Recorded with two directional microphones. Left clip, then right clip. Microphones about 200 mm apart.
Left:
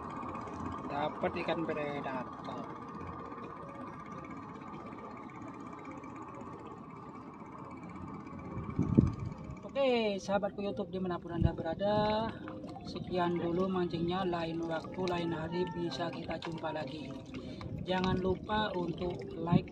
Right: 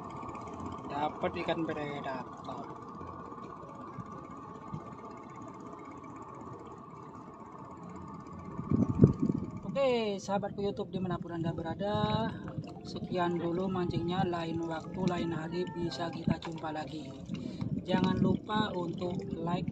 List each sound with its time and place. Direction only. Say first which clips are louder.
0.2 s vehicle: left 1 dB; 25° left (ahead or behind)
0.9 s speech: right 1 dB; 25° right (ahead or behind)
8.5 s vehicle: right 3 dB; 30° left (ahead or behind)
9.8 s speech: right 1 dB; 20° right (ahead or behind)
18.2 s speech: right 1 dB; 20° right (ahead or behind)